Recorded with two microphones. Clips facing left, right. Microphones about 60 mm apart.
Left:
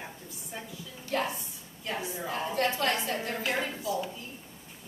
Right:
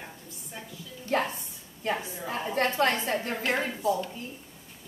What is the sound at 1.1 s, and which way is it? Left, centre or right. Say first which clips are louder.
Music: right 4 dB; right.